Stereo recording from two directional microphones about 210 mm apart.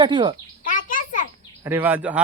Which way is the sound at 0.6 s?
40° left (ahead or behind).